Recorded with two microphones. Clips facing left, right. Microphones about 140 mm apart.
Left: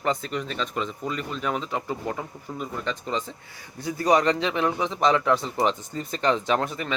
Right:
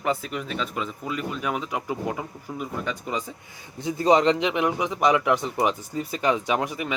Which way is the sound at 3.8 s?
20° right (ahead or behind).